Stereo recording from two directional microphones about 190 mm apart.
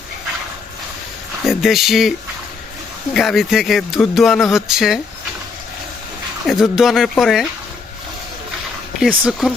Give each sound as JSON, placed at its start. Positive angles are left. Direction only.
{"t": 1.5, "sound": "speech", "side_deg": 0}
{"t": 6.4, "sound": "speech", "side_deg": 0}
{"t": 9.0, "sound": "speech", "side_deg": -5}